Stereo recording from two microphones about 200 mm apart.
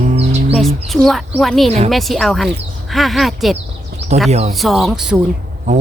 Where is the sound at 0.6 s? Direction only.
Centre (ahead or behind).